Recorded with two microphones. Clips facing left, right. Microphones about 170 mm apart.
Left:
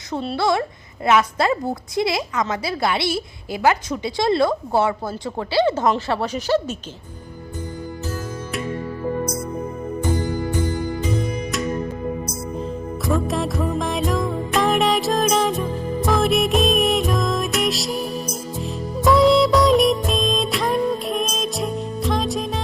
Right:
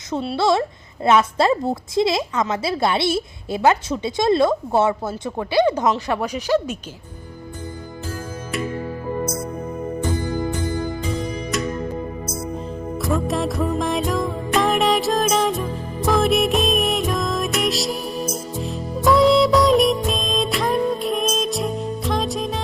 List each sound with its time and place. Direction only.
0.3 s a woman's voice: 25° right (ahead or behind)
13.1 s music: centre (ahead or behind)